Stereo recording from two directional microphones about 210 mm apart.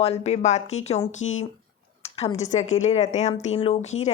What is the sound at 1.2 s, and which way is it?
Speech, 70° left (ahead or behind).